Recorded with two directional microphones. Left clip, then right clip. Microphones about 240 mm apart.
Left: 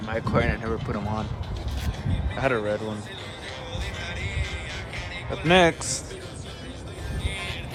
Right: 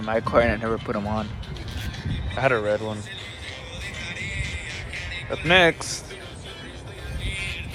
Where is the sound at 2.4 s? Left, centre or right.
Centre.